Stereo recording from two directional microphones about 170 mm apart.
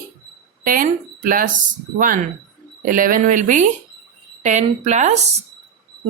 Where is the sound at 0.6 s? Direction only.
55° right (ahead or behind).